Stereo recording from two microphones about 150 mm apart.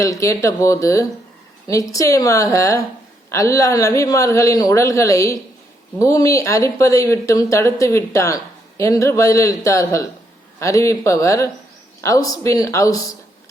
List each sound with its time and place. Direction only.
0.0 s speech: 20° left (ahead or behind)